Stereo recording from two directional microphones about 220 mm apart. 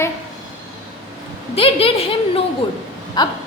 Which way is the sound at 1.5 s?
25° left (ahead or behind).